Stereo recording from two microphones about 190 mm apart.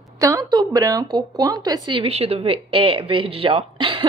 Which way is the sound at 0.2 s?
20° right (ahead or behind).